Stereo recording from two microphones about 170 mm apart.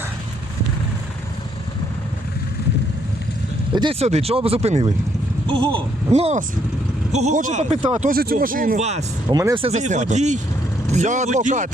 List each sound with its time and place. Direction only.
3.7 s speech: 30° right (ahead or behind)
8.1 s speech: 60° right (ahead or behind); by 9.0 s 40° right (ahead or behind)
9.3 s speech: 15° right (ahead or behind)
9.6 s speech: 40° right (ahead or behind)